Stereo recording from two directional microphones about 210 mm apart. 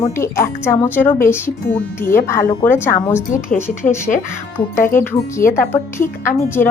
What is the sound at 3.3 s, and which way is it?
Speech, 40° left (ahead or behind).